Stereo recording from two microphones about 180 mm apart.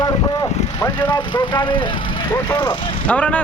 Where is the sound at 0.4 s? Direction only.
40° left (ahead or behind).